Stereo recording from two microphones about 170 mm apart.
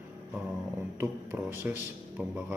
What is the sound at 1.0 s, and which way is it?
Speech, 10° right (ahead or behind).